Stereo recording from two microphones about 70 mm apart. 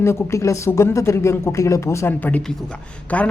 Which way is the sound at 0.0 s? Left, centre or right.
Left.